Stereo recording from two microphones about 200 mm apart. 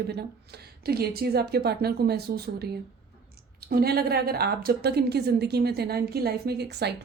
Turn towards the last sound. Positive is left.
turn(degrees=-55)  # may be behind; listen again after turning